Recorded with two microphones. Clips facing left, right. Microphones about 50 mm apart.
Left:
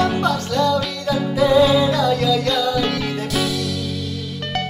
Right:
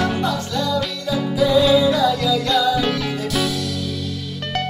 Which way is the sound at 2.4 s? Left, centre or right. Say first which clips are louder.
Right 1 dB; centre.